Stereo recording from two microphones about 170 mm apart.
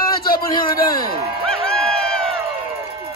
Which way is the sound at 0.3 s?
60° left (ahead or behind).